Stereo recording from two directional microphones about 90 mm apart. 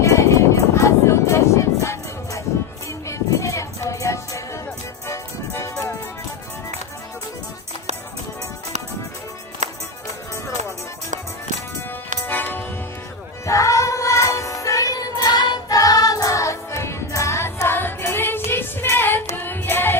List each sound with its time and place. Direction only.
0.0 s music: 35° left (ahead or behind)
12.3 s music: 20° left (ahead or behind)
13.4 s music: 35° left (ahead or behind)